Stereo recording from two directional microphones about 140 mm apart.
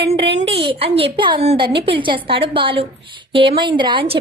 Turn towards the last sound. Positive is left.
turn(degrees=-35)  # may be behind; listen again after turning